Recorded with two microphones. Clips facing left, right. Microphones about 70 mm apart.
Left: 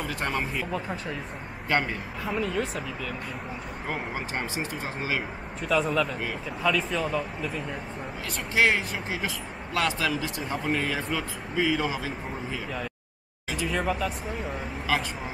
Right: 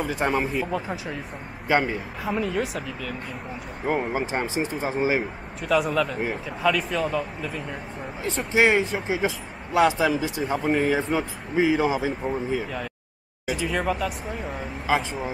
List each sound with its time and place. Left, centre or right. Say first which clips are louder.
0.3 s speech: right 5 dB; centre
5.6 s speech: right 3 dB; centre
8.5 s speech: right 4 dB; right
10.9 s speech: right 6 dB; right
13.7 s speech: right 1 dB; centre